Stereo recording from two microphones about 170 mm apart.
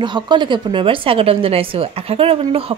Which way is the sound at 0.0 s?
25° right (ahead or behind).